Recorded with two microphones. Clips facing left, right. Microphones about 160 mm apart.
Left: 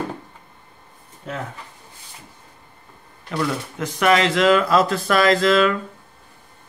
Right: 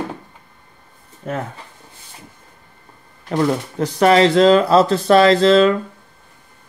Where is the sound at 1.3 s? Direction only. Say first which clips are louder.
Right 6 dB; 50° right (ahead or behind).